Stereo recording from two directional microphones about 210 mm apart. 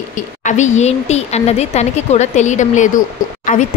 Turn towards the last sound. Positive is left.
turn(degrees=40)  # may be behind; listen again after turning